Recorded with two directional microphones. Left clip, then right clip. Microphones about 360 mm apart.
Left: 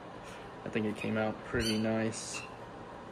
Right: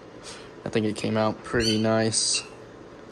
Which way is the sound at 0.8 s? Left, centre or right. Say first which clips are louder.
Right 8 dB; right.